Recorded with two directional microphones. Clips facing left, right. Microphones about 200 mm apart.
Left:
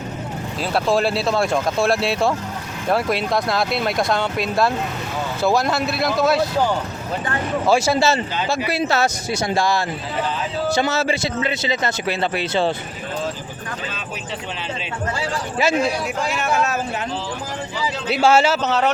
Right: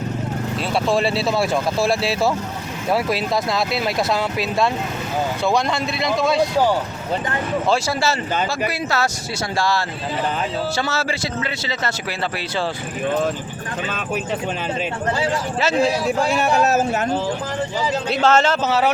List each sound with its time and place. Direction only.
0.7 s speech: centre (ahead or behind)
7.7 s a man's voice: 20° left (ahead or behind)
15.7 s a man's voice: 30° right (ahead or behind)
18.1 s speech: 10° left (ahead or behind)